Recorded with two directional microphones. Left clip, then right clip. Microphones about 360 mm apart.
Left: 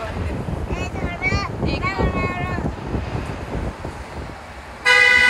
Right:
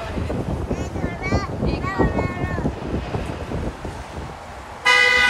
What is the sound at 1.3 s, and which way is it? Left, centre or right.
Boat, centre.